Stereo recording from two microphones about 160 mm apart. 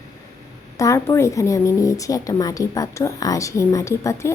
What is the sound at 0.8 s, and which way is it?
A woman's voice, 20° left (ahead or behind).